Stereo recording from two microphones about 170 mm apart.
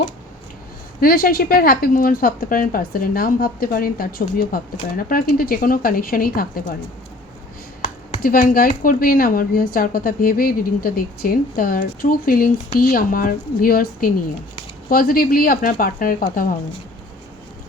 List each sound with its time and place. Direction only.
1.0 s speech: 60° left (ahead or behind)
8.2 s speech: 55° left (ahead or behind)